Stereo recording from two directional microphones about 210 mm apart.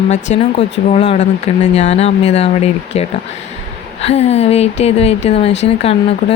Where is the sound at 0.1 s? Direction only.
35° left (ahead or behind).